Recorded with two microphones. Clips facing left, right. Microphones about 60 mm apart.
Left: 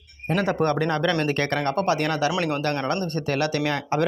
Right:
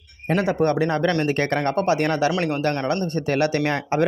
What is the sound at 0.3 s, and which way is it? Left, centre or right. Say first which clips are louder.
Speech: right 2 dB; centre.